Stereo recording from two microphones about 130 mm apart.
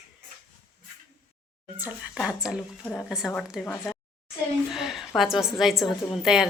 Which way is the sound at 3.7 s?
15° left (ahead or behind).